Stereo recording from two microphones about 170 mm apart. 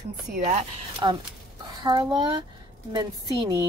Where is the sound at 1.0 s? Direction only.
25° right (ahead or behind).